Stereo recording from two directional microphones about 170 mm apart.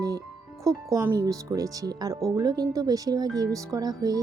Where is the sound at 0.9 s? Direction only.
20° right (ahead or behind).